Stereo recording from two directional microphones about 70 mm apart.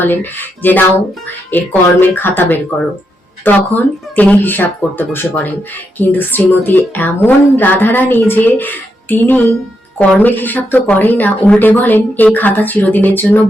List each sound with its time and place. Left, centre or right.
0.0 s speech: left